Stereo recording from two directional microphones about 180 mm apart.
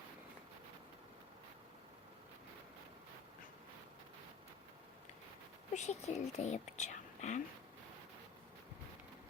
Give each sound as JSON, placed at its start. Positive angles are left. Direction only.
{"t": 5.7, "sound": "speech", "side_deg": 40}